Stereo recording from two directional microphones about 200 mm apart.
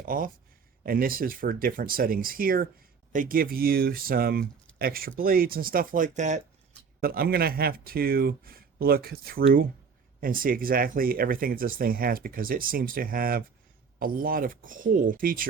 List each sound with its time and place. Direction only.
0.0 s speech: 45° right (ahead or behind)
7.0 s speech: 50° right (ahead or behind)